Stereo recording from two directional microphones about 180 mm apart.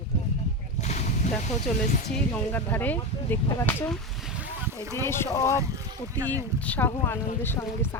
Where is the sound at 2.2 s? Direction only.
10° left (ahead or behind).